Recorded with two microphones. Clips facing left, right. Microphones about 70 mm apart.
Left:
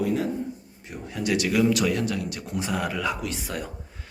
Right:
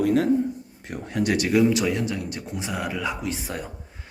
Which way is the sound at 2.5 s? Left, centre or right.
Centre.